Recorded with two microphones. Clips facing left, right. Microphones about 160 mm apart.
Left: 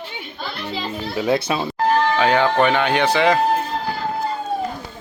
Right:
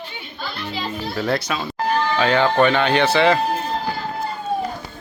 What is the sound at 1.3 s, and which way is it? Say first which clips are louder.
Speech: left 3 dB; 30° left (ahead or behind).